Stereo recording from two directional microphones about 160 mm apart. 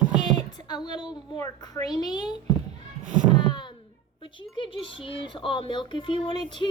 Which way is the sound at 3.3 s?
30° left (ahead or behind).